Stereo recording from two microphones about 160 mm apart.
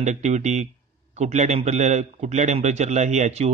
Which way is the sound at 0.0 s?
45° right (ahead or behind).